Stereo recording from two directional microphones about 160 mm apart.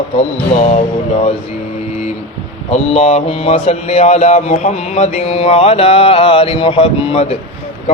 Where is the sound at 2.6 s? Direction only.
45° left (ahead or behind).